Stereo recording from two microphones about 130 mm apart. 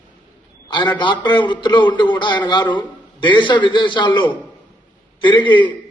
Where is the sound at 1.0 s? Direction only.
35° left (ahead or behind).